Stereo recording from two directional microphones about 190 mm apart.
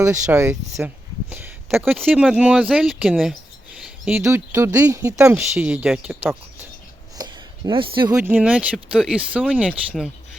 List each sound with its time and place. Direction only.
0.0 s speech: 15° right (ahead or behind)
2.0 s speech: centre (ahead or behind)
3.8 s a sound: 5° right (ahead or behind)
4.2 s speech: 15° right (ahead or behind)
7.2 s a sound: 25° right (ahead or behind)
8.1 s speech: 10° right (ahead or behind)